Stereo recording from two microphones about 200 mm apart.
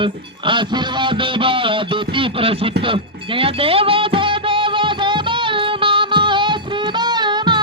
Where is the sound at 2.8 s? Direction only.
25° right (ahead or behind).